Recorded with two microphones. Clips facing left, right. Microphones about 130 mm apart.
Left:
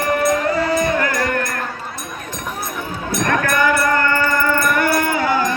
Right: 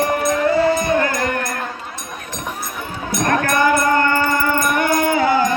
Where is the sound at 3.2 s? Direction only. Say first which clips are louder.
Right 1 dB; 30° right (ahead or behind).